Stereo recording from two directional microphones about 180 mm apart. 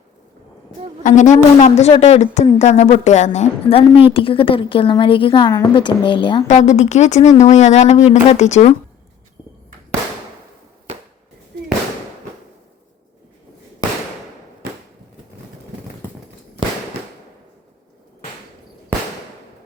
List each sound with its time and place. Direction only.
1.0 s a woman's voice: 45° left (ahead or behind); by 6.4 s 25° left (ahead or behind)
6.5 s a woman's voice: 40° left (ahead or behind)